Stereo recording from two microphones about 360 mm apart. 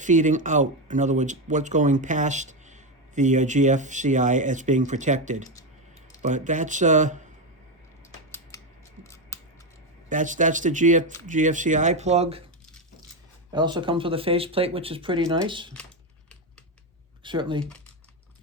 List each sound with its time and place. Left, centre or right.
0.0 s speech: right
9.3 s scissors: centre
10.1 s speech: right
13.5 s speech: centre
17.2 s speech: centre